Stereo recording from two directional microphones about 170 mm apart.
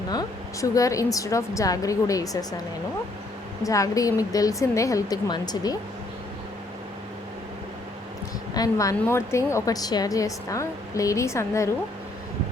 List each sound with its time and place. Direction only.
0.1 s a woman's voice: 20° left (ahead or behind)
3.6 s a woman's voice: 20° left (ahead or behind)
8.5 s a woman's voice: 20° left (ahead or behind)